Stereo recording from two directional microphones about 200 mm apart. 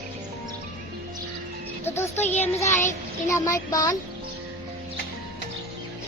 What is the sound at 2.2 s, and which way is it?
Child singing, 35° left (ahead or behind).